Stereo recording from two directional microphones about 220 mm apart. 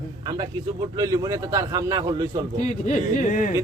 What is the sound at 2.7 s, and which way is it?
Speech, 35° left (ahead or behind).